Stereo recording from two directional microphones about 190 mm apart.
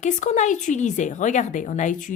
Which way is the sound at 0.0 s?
40° left (ahead or behind).